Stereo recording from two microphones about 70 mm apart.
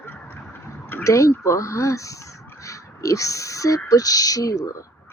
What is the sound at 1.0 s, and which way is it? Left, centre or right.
Speech, left.